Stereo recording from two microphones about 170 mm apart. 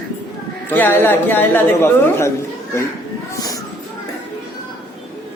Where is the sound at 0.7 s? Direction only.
10° left (ahead or behind).